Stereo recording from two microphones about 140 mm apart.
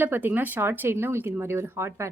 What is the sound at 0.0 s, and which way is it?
Speech, 15° right (ahead or behind).